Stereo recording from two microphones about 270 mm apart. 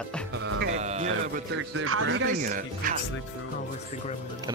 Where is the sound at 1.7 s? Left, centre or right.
Right.